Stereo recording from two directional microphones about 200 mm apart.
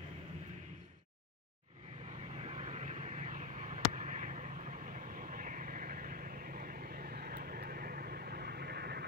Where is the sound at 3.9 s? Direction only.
40° right (ahead or behind).